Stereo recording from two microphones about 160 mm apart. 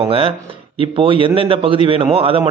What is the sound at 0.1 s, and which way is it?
A man's voice, 35° right (ahead or behind).